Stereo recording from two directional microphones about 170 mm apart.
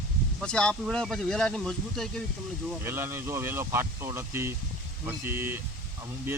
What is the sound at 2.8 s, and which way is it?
Speech, 15° right (ahead or behind).